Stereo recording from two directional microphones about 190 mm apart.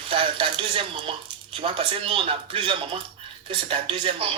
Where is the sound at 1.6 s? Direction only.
25° right (ahead or behind).